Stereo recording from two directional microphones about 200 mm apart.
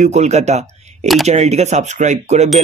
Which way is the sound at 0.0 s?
35° right (ahead or behind).